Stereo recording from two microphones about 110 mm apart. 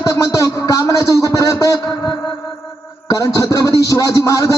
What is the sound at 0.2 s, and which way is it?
Speech, 30° left (ahead or behind).